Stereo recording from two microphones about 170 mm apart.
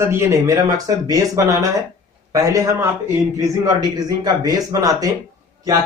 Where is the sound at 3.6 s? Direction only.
20° right (ahead or behind).